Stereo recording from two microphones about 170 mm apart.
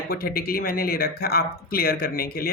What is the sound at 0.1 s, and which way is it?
Speech, 60° left (ahead or behind).